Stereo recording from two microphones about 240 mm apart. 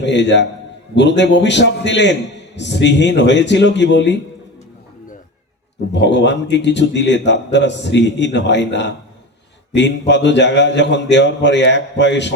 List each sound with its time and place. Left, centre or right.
0.0 s a man's voice: left
5.9 s a man's voice: left